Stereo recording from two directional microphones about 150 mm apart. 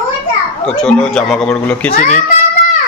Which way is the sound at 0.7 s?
5° left (ahead or behind).